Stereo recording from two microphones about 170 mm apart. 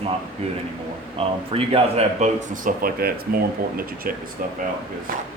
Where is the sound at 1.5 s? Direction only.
35° right (ahead or behind); by 4.2 s 60° right (ahead or behind).